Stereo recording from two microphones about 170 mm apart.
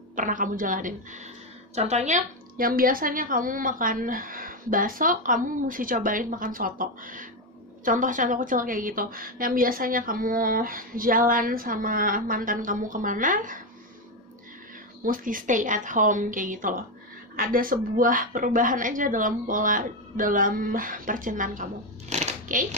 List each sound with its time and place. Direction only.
0.1 s a woman's voice: 50° right (ahead or behind)
1.8 s a woman's voice: 40° right (ahead or behind)
15.0 s a woman's voice: 55° right (ahead or behind)
22.1 s a sound: 45° right (ahead or behind)